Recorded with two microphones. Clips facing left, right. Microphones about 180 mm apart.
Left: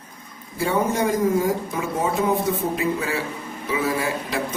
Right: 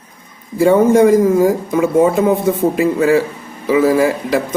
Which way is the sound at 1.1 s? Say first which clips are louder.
Right 9 dB; 90° right.